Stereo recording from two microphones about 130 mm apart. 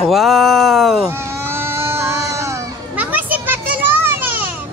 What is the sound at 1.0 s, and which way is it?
Baby cry, 20° right (ahead or behind).